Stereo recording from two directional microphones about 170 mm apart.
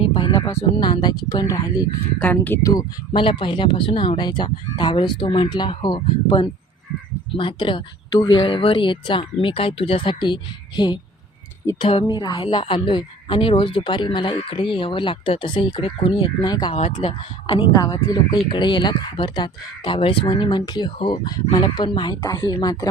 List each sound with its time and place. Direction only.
0.0 s speech: 30° left (ahead or behind)
2.1 s speech: 10° left (ahead or behind)
3.1 s speech: 30° left (ahead or behind)
16.7 s speech: 35° left (ahead or behind)
17.8 s speech: 20° left (ahead or behind)